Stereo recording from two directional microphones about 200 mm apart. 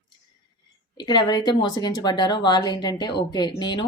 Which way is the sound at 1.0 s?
20° left (ahead or behind).